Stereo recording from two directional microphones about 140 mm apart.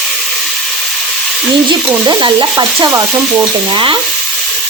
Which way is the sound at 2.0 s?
35° right (ahead or behind).